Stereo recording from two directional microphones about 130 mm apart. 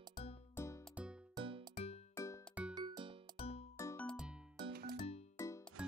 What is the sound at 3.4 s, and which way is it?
Music, 55° left (ahead or behind).